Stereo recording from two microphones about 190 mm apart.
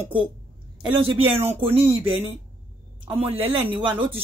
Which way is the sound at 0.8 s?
30° right (ahead or behind).